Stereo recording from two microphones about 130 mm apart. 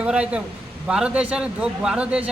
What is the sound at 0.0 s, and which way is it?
A man's voice, 10° right (ahead or behind).